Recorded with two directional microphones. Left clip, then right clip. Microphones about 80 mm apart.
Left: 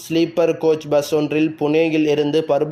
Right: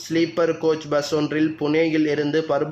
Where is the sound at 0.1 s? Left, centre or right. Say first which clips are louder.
Left 3 dB; left.